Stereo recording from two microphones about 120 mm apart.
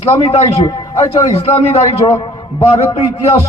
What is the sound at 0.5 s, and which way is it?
Speech, 40° left (ahead or behind).